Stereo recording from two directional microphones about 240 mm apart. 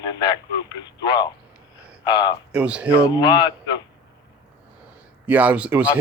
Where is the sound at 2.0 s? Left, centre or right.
Centre.